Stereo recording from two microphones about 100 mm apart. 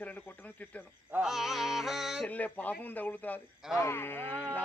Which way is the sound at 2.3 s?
15° left (ahead or behind).